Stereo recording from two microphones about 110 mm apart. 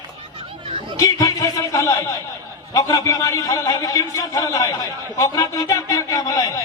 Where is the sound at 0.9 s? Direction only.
30° left (ahead or behind).